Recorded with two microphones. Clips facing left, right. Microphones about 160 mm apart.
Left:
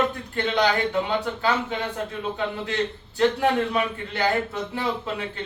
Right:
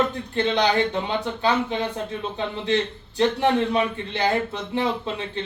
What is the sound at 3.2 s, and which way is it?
A man's voice, 25° right (ahead or behind).